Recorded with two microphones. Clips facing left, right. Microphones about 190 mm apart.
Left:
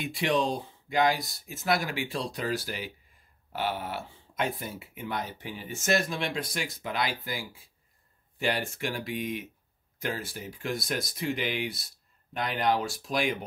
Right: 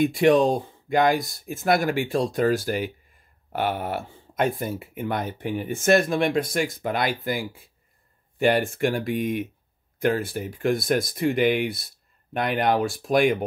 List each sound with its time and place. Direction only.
0.0 s speech: 50° right (ahead or behind)